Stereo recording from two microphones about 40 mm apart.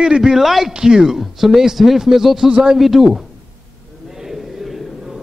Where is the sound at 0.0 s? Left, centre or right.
Centre.